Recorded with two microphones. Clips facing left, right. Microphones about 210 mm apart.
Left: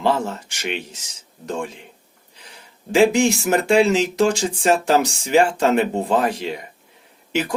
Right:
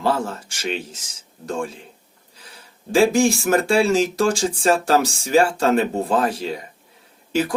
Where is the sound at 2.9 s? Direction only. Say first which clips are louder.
Left 1 dB; 20° left (ahead or behind).